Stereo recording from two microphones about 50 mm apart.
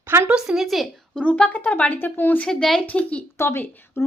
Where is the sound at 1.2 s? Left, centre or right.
Left.